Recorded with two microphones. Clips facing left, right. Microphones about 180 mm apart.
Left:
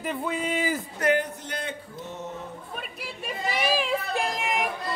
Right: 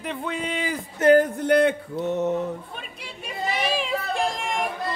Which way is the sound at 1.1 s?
60° right (ahead or behind).